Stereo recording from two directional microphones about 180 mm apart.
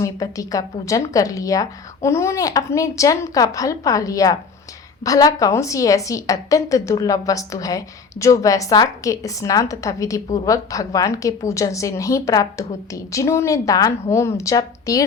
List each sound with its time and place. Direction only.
0.0 s a woman's voice: 20° left (ahead or behind)